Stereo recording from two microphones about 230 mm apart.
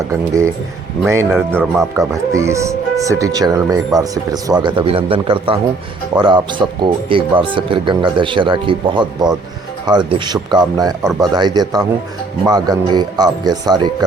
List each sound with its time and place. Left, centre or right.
0.0 s speech: centre